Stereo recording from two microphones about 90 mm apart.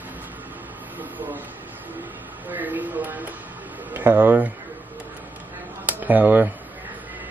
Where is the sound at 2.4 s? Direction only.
20° right (ahead or behind).